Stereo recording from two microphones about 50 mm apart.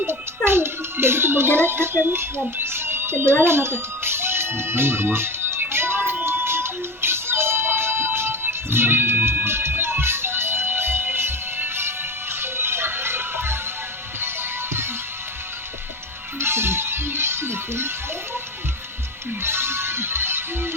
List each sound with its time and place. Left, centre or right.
0.1 s speech: right
3.4 s music: right
16.4 s music: right
19.4 s music: right